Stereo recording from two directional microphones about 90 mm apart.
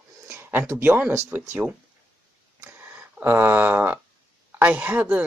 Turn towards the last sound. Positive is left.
turn(degrees=-15)  # may be behind; listen again after turning